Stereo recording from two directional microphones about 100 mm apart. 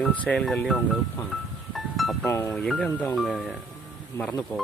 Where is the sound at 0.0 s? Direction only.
15° left (ahead or behind).